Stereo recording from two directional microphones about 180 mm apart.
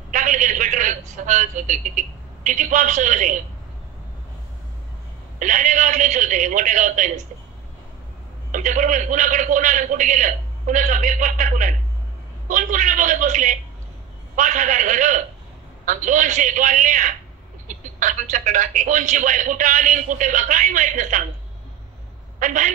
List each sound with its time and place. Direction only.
0.1 s a man's voice: 45° right (ahead or behind)
5.4 s speech: 45° right (ahead or behind)
8.5 s speech: 45° right (ahead or behind)
22.4 s speech: 45° right (ahead or behind)